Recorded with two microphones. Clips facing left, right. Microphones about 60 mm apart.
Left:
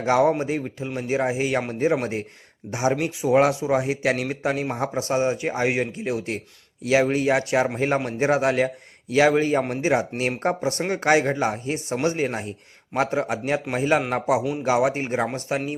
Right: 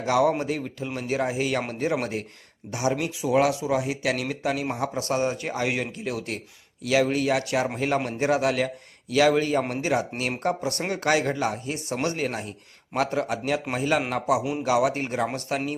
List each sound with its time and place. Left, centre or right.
0.0 s a man's voice: left